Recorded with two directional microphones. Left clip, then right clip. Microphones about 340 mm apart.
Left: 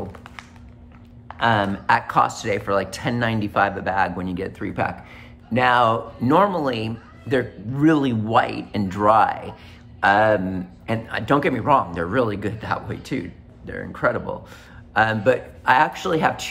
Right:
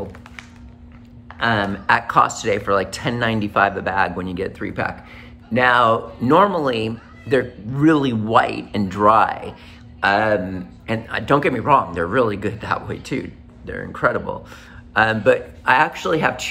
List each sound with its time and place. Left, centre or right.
1.4 s speech: centre